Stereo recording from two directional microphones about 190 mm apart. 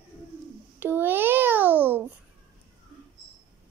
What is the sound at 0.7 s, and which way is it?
Babbling, 10° right (ahead or behind).